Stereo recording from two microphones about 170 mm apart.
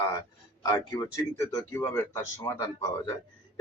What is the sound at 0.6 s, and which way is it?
Speech, 25° left (ahead or behind).